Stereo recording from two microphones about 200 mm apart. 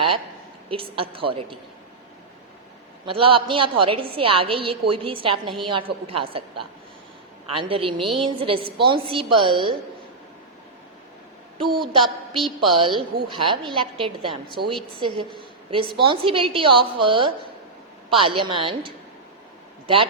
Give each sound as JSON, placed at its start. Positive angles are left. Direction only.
{"t": 0.7, "sound": "a woman's voice", "side_deg": -25}
{"t": 3.1, "sound": "a woman's voice", "side_deg": -25}
{"t": 12.0, "sound": "a woman's voice", "side_deg": 0}
{"t": 12.5, "sound": "a woman's voice", "side_deg": -25}